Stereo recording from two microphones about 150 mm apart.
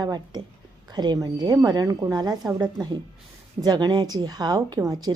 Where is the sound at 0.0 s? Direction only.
30° right (ahead or behind).